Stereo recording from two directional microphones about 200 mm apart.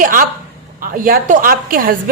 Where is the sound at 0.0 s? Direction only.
45° right (ahead or behind).